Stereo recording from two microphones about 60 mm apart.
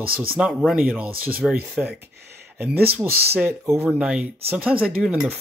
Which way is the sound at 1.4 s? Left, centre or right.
Centre.